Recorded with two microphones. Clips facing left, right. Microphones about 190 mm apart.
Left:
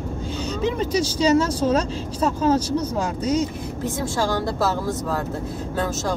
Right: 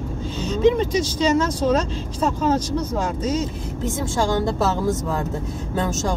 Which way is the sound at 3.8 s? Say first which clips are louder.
Right 1 dB; 20° right (ahead or behind).